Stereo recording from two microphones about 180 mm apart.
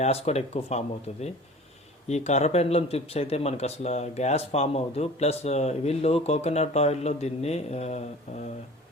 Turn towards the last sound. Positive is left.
turn(degrees=35)  # may be behind; listen again after turning